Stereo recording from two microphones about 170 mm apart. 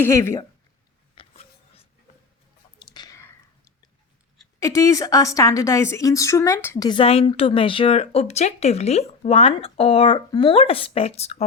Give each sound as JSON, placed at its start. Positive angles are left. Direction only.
{"t": 0.0, "sound": "speech", "side_deg": 15}
{"t": 1.2, "sound": "a sound", "side_deg": 30}
{"t": 2.7, "sound": "whispering", "side_deg": 25}
{"t": 4.6, "sound": "a woman's voice", "side_deg": 20}
{"t": 6.8, "sound": "speech", "side_deg": 30}